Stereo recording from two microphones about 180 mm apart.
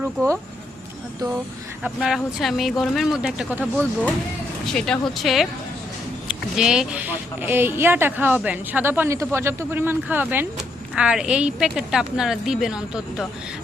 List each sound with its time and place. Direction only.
0.0 s speech: 15° right (ahead or behind)
1.8 s a woman's voice: centre (ahead or behind)
4.6 s a woman's voice: 5° left (ahead or behind)
6.6 s a woman's voice: 5° right (ahead or behind)